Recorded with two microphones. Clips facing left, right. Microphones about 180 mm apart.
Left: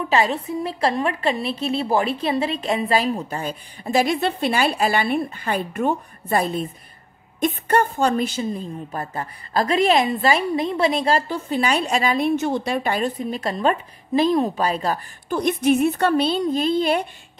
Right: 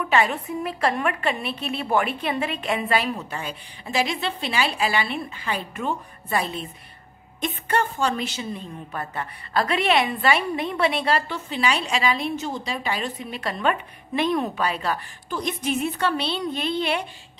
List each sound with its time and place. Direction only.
0.0 s a woman's voice: 30° left (ahead or behind); by 12.3 s 45° left (ahead or behind)
12.4 s a woman's voice: 65° left (ahead or behind); by 15.3 s 40° left (ahead or behind)
15.3 s a woman's voice: 55° left (ahead or behind)